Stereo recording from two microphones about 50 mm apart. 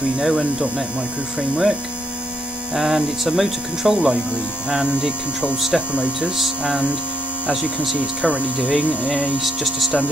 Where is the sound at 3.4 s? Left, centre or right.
Centre.